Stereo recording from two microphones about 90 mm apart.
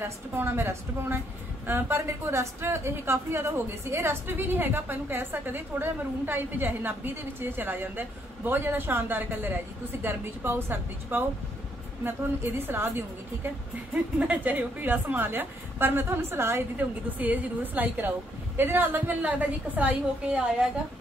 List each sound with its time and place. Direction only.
0.0 s a woman's voice: 25° right (ahead or behind)